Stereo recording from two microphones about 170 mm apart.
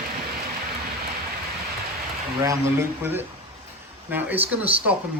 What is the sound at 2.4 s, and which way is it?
Speech, 15° right (ahead or behind).